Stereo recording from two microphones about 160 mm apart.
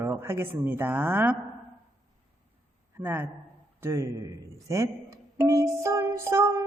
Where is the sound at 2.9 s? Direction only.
15° right (ahead or behind).